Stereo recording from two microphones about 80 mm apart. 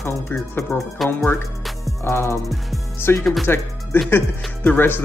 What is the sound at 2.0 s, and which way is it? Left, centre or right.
Speech, left.